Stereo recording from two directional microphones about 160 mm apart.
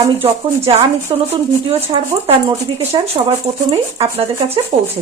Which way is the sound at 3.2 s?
25° right (ahead or behind).